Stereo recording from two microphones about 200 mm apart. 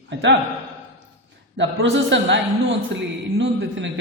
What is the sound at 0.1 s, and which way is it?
Speech, 65° right (ahead or behind).